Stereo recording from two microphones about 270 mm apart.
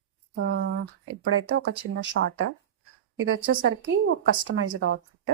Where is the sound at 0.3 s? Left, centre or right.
Right.